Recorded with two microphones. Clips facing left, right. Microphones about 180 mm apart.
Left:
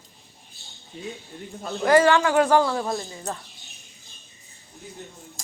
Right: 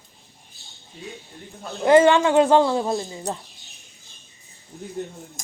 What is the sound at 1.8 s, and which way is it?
A woman's voice, 20° right (ahead or behind).